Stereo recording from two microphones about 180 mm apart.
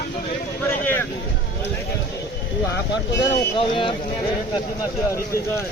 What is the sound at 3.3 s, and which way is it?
Speech, 30° left (ahead or behind).